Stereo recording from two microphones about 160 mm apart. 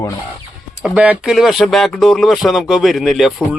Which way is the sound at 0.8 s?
5° right (ahead or behind).